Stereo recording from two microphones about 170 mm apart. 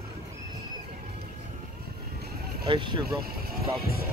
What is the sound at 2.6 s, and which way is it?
Speech, 30° right (ahead or behind).